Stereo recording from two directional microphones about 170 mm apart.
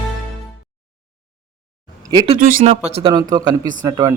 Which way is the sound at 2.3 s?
55° right (ahead or behind).